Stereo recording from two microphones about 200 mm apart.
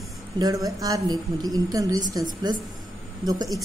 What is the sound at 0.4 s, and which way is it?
A woman's voice, 20° right (ahead or behind).